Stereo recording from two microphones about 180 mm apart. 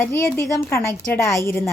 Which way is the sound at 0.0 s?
15° left (ahead or behind).